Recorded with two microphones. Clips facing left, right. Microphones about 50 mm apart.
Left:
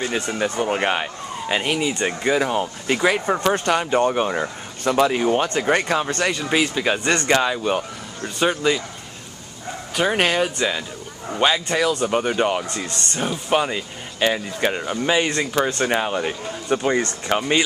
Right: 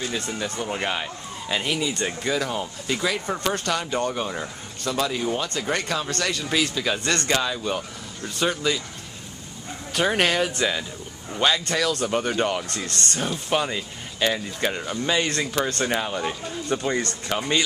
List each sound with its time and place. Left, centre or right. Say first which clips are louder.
0.0 s speech: left 5 dB; left
7.0 s speech: left 4 dB; centre
7.2 s speech: left 5 dB; left
9.9 s speech: left 2 dB; centre